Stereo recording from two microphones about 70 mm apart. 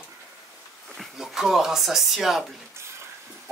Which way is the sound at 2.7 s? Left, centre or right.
Right.